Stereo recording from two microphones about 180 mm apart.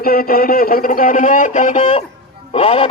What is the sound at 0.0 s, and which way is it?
A man's voice, 55° left (ahead or behind).